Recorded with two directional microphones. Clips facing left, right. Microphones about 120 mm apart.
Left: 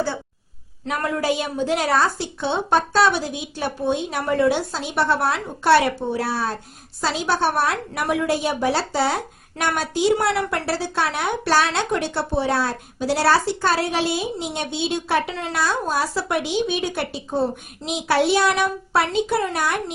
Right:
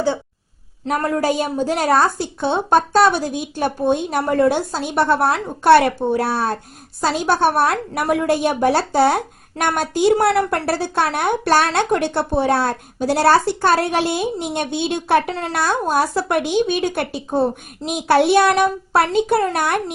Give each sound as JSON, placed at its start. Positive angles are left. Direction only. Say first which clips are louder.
{"t": 0.9, "sound": "a woman's voice", "louder": "right 4 dB", "side_deg": -35}
{"t": 15.5, "sound": "a woman's voice", "louder": "right 4 dB", "side_deg": -55}